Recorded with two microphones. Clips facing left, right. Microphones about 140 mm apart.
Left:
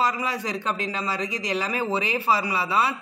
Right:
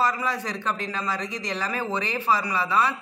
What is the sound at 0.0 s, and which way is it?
A man's voice, 10° left (ahead or behind).